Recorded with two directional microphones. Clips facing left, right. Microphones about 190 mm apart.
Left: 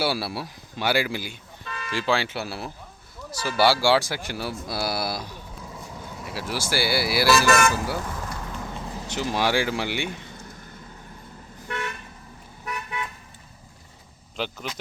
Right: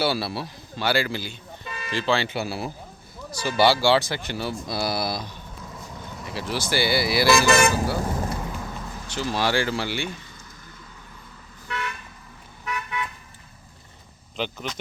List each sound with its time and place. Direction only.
0.0 s a man's voice: 10° left (ahead or behind)
1.6 s toot: 15° right (ahead or behind)
1.9 s a man's voice: 10° left (ahead or behind)
7.3 s speech: 20° right (ahead or behind)
8.0 s vehicle: 35° right (ahead or behind)
8.7 s a sound: 30° left (ahead or behind)
9.0 s a man's voice: 20° left (ahead or behind)
11.7 s toot: 45° left (ahead or behind)
12.6 s car: 30° left (ahead or behind)
14.3 s speech: 5° left (ahead or behind)